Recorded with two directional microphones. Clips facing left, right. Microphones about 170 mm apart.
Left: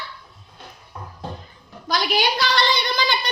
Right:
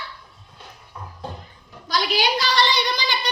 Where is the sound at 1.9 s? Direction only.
55° left (ahead or behind).